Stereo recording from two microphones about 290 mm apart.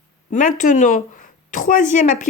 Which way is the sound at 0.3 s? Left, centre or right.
Left.